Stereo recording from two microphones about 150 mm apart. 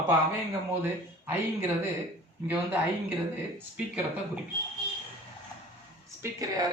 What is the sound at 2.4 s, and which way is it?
Speech, 10° right (ahead or behind).